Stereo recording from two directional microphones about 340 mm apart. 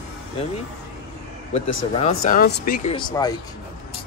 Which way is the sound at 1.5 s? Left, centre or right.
Centre.